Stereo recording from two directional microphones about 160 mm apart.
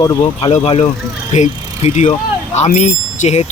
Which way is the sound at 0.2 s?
40° left (ahead or behind).